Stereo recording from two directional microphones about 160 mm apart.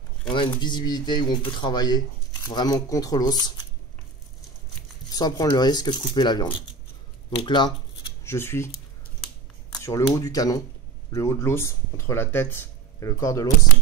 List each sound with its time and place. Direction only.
0.3 s speech: 30° left (ahead or behind)
5.1 s speech: 25° left (ahead or behind)
8.2 s speech: 15° left (ahead or behind)
9.8 s speech: 20° left (ahead or behind)